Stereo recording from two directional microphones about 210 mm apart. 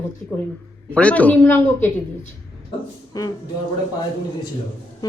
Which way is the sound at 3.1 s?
15° left (ahead or behind).